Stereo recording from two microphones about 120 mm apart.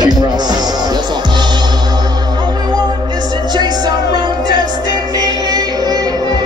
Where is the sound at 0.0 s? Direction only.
35° right (ahead or behind).